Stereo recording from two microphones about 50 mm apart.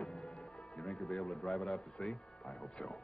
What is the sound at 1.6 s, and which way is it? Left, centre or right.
Speech, centre.